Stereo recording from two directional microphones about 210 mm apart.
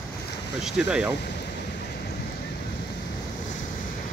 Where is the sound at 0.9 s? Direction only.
5° right (ahead or behind).